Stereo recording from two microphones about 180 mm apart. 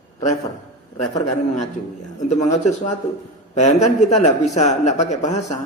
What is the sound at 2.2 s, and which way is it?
Speech, 40° left (ahead or behind).